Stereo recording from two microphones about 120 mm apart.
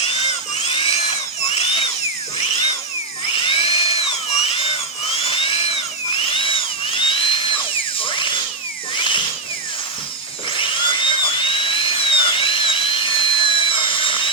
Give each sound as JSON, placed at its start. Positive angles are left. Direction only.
{"t": 0.6, "sound": "drill", "side_deg": 50}
{"t": 1.4, "sound": "drill", "side_deg": 60}
{"t": 3.3, "sound": "drill", "side_deg": 45}
{"t": 9.0, "sound": "tools", "side_deg": 45}
{"t": 10.6, "sound": "helicopter", "side_deg": 45}